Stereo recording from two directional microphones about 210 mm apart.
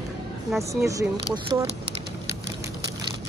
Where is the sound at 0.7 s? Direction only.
15° right (ahead or behind).